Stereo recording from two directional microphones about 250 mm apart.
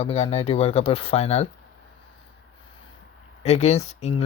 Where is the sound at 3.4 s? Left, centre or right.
Left.